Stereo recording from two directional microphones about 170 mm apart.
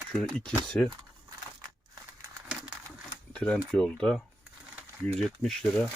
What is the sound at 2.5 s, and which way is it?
Crumpling, 5° right (ahead or behind).